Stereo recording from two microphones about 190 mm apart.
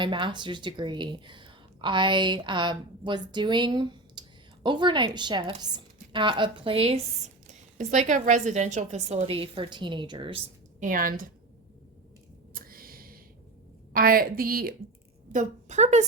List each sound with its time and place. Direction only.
0.0 s a woman's voice: 25° right (ahead or behind)
10.8 s a woman's voice: 45° right (ahead or behind)
12.5 s a sound: 50° right (ahead or behind)
13.9 s a woman's voice: 50° right (ahead or behind)